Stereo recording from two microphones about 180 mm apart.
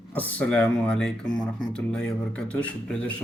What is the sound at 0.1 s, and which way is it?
Speech, 10° left (ahead or behind).